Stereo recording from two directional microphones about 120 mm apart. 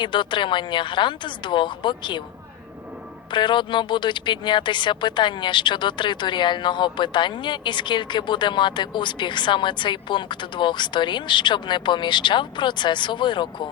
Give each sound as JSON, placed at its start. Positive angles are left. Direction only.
{"t": 0.0, "sound": "speech", "side_deg": 40}
{"t": 3.3, "sound": "speech", "side_deg": 40}